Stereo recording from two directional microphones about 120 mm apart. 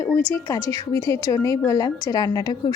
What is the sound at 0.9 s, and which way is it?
A woman's voice, 25° left (ahead or behind).